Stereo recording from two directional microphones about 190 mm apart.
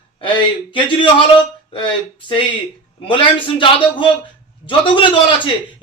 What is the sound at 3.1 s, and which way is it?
Speech, 25° left (ahead or behind).